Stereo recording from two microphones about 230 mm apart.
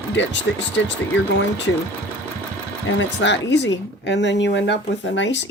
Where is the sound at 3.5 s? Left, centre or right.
Left.